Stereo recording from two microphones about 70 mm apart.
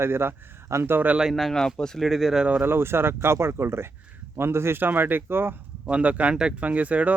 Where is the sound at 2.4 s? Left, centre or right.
Right.